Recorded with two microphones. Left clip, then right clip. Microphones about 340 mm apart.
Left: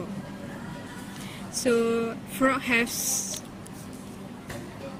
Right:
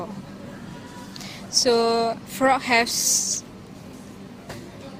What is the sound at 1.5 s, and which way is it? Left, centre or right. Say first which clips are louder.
A woman's voice: right 5 dB; centre.